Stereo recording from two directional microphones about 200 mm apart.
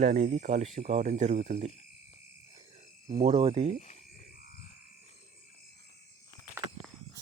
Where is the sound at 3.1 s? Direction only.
30° right (ahead or behind).